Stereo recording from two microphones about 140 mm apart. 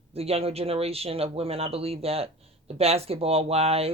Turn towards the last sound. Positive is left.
turn(degrees=-45)  # may be behind; listen again after turning